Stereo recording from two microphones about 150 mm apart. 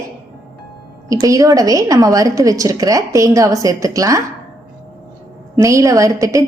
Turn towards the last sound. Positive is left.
turn(degrees=-20)  # may be behind; listen again after turning